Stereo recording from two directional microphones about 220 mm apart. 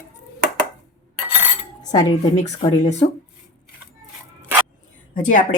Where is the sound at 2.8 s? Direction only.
30° left (ahead or behind).